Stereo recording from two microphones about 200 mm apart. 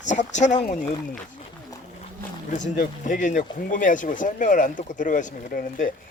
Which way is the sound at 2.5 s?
40° left (ahead or behind).